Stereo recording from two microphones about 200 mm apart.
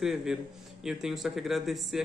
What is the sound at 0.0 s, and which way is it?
Speech, centre (ahead or behind).